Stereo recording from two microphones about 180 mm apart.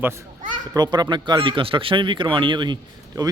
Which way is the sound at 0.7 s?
25° right (ahead or behind).